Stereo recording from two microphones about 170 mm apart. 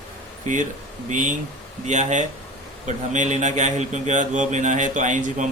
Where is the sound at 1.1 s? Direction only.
45° right (ahead or behind).